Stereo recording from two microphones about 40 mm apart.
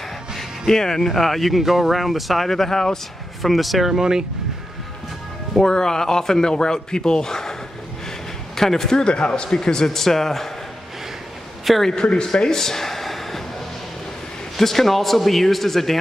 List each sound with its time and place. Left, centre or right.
0.4 s speech: centre
3.4 s speech: centre
5.6 s a man's voice: centre
8.5 s a man's voice: centre
9.0 s a man's voice: left; by 10.5 s centre
11.9 s speech: left; by 13.4 s centre
14.6 s speech: centre